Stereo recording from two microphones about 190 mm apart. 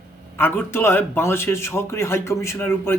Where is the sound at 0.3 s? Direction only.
10° left (ahead or behind).